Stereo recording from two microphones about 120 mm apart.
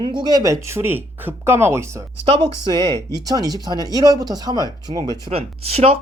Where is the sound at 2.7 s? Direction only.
40° right (ahead or behind).